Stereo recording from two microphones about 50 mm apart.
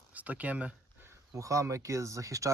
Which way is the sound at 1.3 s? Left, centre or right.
Right.